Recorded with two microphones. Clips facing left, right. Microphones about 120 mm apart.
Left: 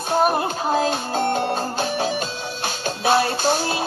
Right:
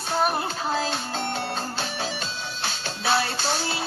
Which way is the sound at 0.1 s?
50° left (ahead or behind).